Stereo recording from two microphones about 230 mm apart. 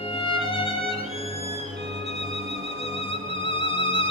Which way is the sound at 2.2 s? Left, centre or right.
Left.